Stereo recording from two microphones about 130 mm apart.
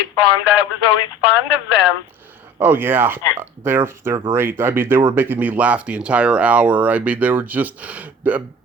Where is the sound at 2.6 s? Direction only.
15° right (ahead or behind).